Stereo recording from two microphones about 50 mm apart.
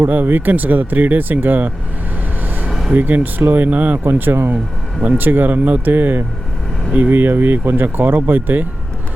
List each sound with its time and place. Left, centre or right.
0.0 s speech: right
2.9 s speech: right
4.0 s speech: right